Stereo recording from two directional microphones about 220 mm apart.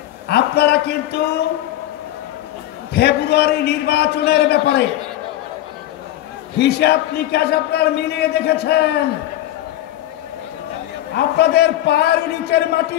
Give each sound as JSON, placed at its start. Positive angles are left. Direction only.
{"t": 0.3, "sound": "a man's voice", "side_deg": 50}
{"t": 2.9, "sound": "a man's voice", "side_deg": 50}
{"t": 6.6, "sound": "a man's voice", "side_deg": 50}
{"t": 11.1, "sound": "a man's voice", "side_deg": 50}